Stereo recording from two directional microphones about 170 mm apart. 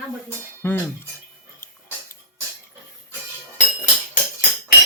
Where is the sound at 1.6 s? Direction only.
15° left (ahead or behind).